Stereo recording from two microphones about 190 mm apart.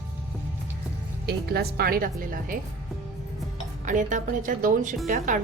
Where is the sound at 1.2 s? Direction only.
55° right (ahead or behind).